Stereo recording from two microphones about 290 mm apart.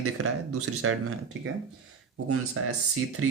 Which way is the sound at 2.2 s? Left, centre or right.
Right.